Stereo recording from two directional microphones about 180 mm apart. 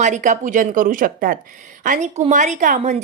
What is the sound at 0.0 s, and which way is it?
A woman's voice, 45° right (ahead or behind).